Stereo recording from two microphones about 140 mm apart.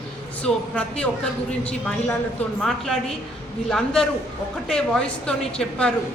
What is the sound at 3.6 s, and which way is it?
A man's voice, 5° left (ahead or behind).